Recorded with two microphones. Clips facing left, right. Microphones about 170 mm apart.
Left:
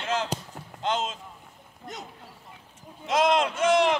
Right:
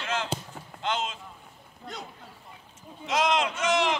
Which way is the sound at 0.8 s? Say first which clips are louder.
Left 2 dB; 40° left (ahead or behind).